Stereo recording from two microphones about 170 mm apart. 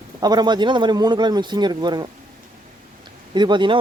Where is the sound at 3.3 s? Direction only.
25° right (ahead or behind).